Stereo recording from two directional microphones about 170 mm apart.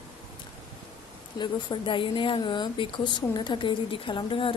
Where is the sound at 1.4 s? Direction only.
30° left (ahead or behind).